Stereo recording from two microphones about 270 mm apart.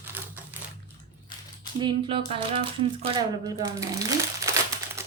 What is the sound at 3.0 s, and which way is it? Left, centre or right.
Speech, centre.